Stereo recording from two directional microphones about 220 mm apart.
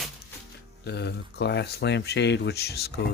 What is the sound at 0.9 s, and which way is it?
Speech, 50° left (ahead or behind).